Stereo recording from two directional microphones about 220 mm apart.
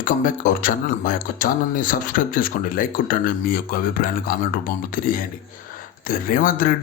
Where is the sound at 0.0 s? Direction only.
40° left (ahead or behind).